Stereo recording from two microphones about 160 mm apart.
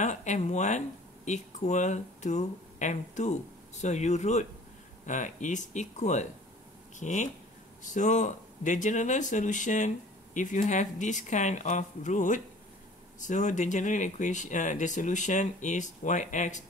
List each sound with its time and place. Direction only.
0.0 s speech: 50° left (ahead or behind)